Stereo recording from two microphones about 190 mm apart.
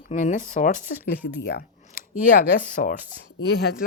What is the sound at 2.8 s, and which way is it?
Speech, 50° left (ahead or behind).